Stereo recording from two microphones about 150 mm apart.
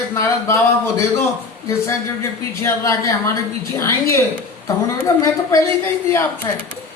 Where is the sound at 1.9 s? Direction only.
20° left (ahead or behind).